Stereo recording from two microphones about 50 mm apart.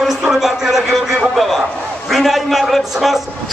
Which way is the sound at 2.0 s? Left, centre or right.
Centre.